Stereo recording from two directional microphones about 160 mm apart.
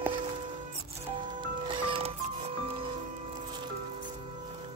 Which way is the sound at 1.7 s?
35° right (ahead or behind).